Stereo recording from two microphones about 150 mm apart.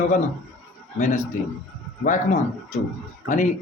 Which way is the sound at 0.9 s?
50° left (ahead or behind).